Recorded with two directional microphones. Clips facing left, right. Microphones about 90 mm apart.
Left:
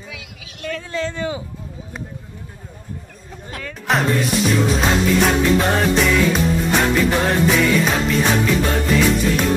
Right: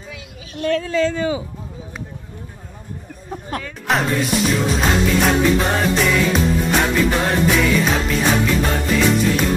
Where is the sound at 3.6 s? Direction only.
Centre (ahead or behind).